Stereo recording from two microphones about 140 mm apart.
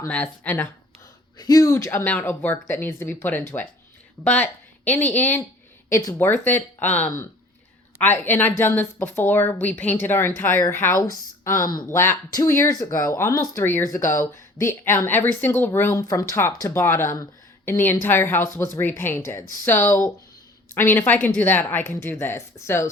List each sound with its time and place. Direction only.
0.1 s speech: 10° left (ahead or behind)
1.4 s speech: 25° left (ahead or behind)
11.9 s speech: 20° left (ahead or behind)